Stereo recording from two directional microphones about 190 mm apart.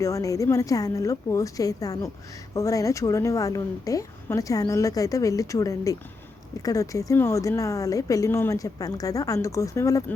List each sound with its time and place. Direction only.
0.0 s a woman's voice: 15° left (ahead or behind)